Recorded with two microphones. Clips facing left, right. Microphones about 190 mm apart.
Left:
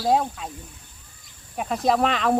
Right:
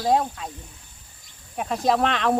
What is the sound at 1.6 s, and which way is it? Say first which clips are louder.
Speech: even; centre (ahead or behind).